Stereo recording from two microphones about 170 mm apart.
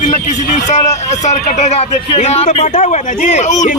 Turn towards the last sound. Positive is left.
turn(degrees=45)  # may be behind; listen again after turning